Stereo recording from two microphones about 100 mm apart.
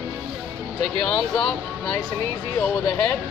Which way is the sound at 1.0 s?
10° left (ahead or behind).